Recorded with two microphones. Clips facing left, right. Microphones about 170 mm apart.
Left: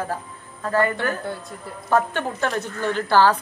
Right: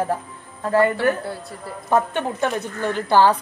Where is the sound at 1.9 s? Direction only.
20° right (ahead or behind).